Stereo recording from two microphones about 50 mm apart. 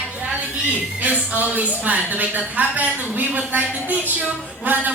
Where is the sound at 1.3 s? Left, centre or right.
Right.